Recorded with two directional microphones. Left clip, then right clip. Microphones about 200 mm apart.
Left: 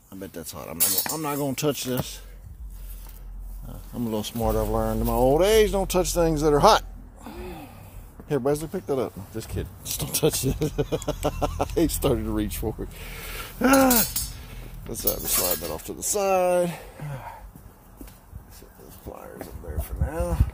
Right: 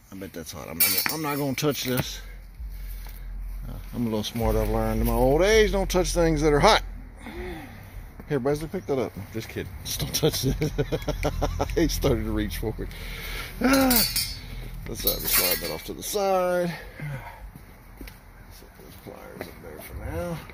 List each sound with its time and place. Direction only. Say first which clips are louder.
0.2 s speech: left 1 dB; 5° left (ahead or behind)
1.1 s speech: even; centre (ahead or behind)
3.9 s speech: right 1 dB; centre (ahead or behind)
5.0 s speech: left 1 dB; 10° left (ahead or behind)
15.3 s speech: right 3 dB; 15° left (ahead or behind)
15.6 s speech: even; 5° left (ahead or behind)
19.1 s a sound: left 3 dB; 20° left (ahead or behind)